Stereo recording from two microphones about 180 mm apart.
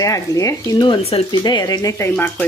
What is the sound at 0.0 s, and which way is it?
Speech, 20° left (ahead or behind).